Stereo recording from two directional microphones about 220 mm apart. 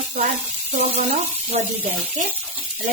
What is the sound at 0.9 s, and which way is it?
Speech, 30° right (ahead or behind).